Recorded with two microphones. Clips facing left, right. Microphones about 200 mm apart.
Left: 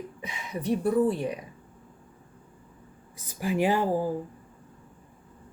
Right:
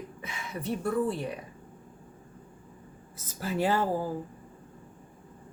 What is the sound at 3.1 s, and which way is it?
Speech, 15° left (ahead or behind).